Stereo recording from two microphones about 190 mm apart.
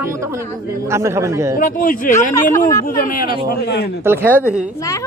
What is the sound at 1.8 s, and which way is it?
Speech, 45° left (ahead or behind).